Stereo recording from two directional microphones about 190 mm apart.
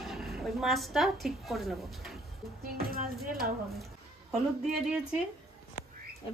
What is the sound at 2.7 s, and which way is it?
Speech, 50° right (ahead or behind).